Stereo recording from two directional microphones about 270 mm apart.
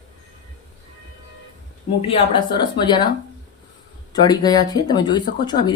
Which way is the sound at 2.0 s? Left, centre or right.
Centre.